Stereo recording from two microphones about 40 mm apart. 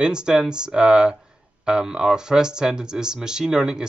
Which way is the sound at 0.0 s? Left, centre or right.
Right.